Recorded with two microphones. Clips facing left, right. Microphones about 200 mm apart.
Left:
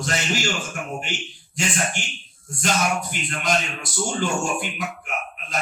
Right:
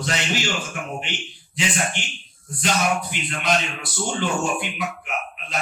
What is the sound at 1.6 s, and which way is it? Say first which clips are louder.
Speech: even; 45° left (ahead or behind).